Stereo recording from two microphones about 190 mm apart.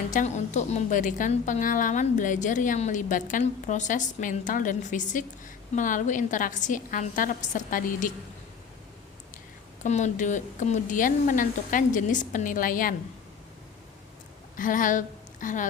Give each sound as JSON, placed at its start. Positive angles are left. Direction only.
{"t": 0.1, "sound": "a woman's voice", "side_deg": 40}
{"t": 9.8, "sound": "speech", "side_deg": 40}
{"t": 14.5, "sound": "a woman's voice", "side_deg": 45}